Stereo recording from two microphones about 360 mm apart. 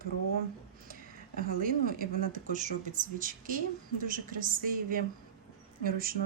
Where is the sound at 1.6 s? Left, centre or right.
Right.